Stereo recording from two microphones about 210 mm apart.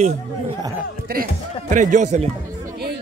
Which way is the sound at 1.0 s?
45° right (ahead or behind).